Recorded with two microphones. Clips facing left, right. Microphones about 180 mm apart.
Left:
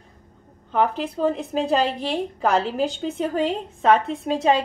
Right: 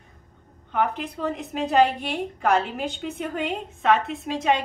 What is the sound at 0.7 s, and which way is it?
A woman's voice, 30° left (ahead or behind).